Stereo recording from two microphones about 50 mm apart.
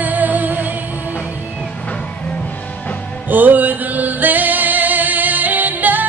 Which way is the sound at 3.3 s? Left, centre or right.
Right.